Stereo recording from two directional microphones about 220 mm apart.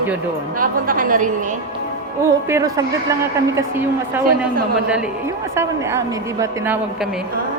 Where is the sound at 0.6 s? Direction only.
40° right (ahead or behind).